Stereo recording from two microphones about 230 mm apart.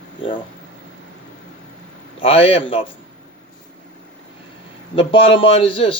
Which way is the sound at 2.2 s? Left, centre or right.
Left.